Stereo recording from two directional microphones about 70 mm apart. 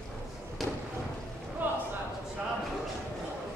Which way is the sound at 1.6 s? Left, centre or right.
Right.